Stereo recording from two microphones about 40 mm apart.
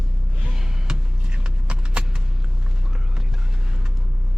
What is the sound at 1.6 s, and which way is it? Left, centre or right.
Clip-clop, right.